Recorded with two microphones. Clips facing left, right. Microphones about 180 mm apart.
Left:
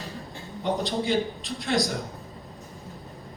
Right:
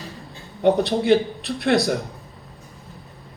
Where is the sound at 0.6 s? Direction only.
65° right (ahead or behind).